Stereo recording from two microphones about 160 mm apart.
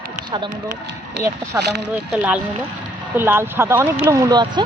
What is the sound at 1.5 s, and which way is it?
Speech, 15° right (ahead or behind).